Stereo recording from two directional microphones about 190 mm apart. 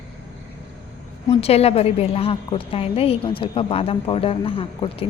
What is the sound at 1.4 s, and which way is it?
A woman's voice, 30° left (ahead or behind).